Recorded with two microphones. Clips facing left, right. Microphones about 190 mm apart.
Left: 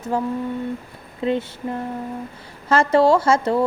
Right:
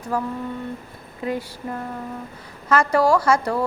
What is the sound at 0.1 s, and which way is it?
A woman's voice, 25° left (ahead or behind).